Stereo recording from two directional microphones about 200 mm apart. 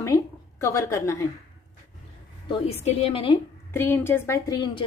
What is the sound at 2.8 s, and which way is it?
Speech, 30° left (ahead or behind).